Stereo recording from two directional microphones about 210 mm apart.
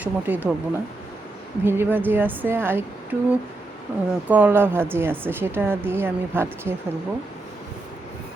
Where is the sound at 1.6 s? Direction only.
10° right (ahead or behind).